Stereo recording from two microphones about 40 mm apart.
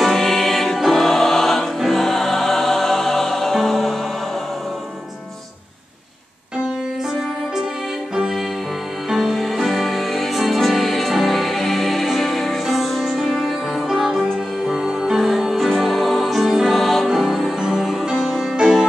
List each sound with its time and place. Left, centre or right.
0.0 s music: centre
9.1 s music: centre
13.8 s music: centre